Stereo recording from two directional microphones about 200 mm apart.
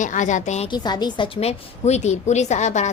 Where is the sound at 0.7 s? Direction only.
20° left (ahead or behind).